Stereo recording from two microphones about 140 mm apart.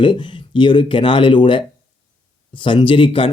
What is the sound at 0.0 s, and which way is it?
Speech, 35° left (ahead or behind).